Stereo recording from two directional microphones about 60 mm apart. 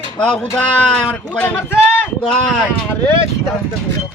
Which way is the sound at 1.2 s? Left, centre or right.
Left.